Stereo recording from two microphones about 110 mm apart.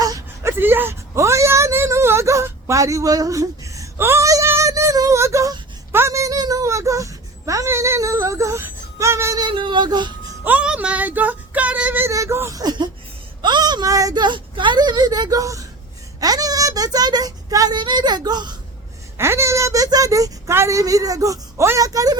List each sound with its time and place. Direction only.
0.0 s whimper: 35° right (ahead or behind)
0.6 s a sound: 20° right (ahead or behind)
9.5 s speech: 50° right (ahead or behind)
10.4 s child singing: 10° right (ahead or behind)
12.1 s speech: 25° right (ahead or behind)
19.1 s speech: 25° right (ahead or behind)